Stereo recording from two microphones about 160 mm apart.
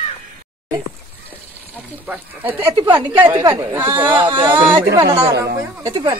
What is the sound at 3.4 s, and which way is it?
A woman's voice, 25° right (ahead or behind).